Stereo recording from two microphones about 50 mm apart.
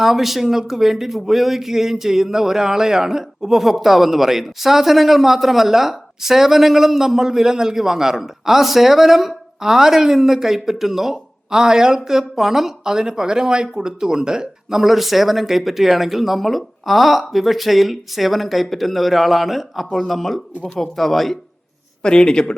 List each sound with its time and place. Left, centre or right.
0.0 s speech: centre
22.0 s speech: centre